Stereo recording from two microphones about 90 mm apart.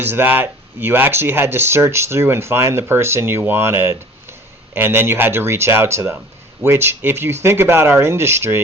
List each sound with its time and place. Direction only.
0.0 s speech: 25° right (ahead or behind)